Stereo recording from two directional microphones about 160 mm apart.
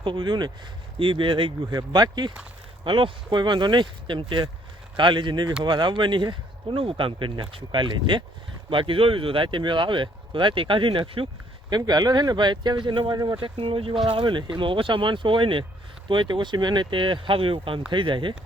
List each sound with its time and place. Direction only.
0.0 s speech: 30° right (ahead or behind)